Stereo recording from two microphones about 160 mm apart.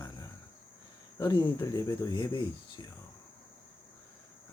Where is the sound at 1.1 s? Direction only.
25° left (ahead or behind).